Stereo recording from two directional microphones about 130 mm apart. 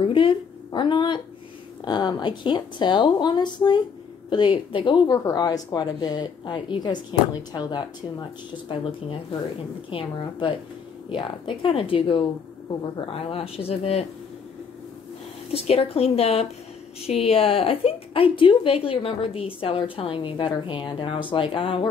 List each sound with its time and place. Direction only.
0.0 s a sound: 40° left (ahead or behind)
1.9 s a woman's voice: 35° left (ahead or behind)
5.0 s a woman's voice: 30° left (ahead or behind)
9.8 s a woman's voice: 40° left (ahead or behind)
15.5 s a woman's voice: 50° left (ahead or behind)